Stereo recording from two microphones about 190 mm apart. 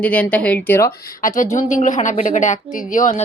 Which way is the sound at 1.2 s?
45° left (ahead or behind).